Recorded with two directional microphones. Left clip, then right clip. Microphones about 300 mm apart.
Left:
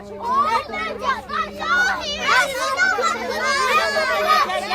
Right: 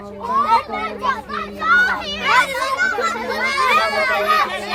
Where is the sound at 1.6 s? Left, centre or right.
Centre.